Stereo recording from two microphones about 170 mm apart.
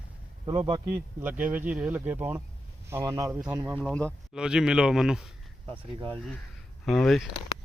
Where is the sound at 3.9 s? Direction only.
5° left (ahead or behind).